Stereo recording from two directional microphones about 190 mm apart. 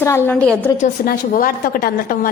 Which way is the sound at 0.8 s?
45° left (ahead or behind).